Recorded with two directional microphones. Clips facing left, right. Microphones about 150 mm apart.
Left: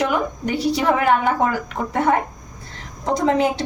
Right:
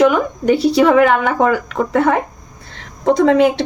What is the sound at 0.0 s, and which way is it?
Speech, 80° right.